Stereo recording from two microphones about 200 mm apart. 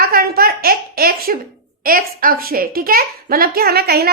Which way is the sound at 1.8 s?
45° right (ahead or behind).